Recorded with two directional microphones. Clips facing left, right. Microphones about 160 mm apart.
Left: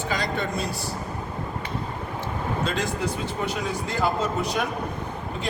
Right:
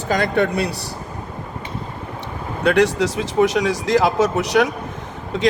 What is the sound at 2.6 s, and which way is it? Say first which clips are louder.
A man's voice: right 13 dB; 70° right (ahead or behind).